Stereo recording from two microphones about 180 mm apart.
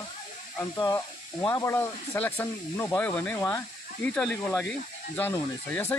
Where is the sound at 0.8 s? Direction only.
20° left (ahead or behind).